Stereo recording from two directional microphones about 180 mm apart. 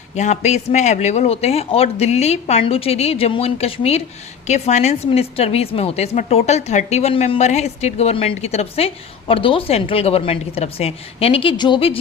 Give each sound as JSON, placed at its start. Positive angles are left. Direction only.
{"t": 0.2, "sound": "a woman's voice", "side_deg": 40}